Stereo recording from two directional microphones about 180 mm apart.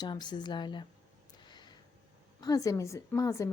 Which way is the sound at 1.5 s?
25° left (ahead or behind).